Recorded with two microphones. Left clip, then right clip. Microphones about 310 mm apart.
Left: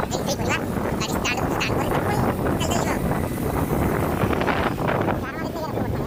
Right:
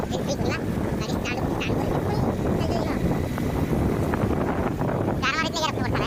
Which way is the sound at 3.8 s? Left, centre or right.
Left.